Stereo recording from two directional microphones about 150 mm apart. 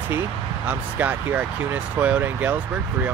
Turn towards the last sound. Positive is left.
turn(degrees=-10)  # may be behind; listen again after turning